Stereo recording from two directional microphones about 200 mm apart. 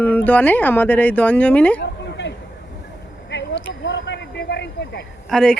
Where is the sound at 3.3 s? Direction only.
60° left (ahead or behind).